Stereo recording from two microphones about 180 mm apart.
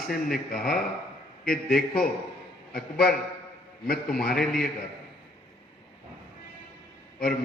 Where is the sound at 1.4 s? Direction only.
55° left (ahead or behind).